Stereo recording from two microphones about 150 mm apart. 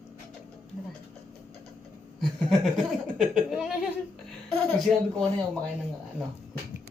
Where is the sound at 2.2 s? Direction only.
Centre (ahead or behind).